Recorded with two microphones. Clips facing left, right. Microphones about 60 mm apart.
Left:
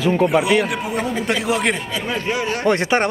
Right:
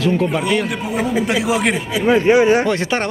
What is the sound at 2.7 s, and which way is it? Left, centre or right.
Speech, centre.